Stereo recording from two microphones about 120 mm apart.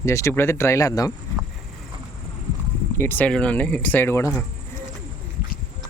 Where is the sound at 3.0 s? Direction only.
15° left (ahead or behind).